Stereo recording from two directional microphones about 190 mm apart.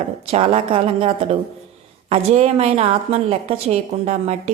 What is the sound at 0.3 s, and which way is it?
A woman's voice, 30° right (ahead or behind).